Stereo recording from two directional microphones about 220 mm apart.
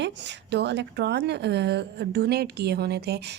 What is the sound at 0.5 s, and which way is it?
A woman's voice, 50° right (ahead or behind).